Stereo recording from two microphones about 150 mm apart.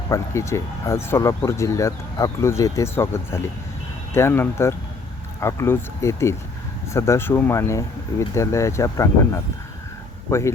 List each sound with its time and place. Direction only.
0.1 s speech: 20° left (ahead or behind)
10.2 s speech: 20° left (ahead or behind)